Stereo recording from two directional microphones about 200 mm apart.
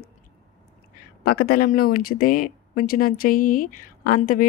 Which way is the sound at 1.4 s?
45° left (ahead or behind).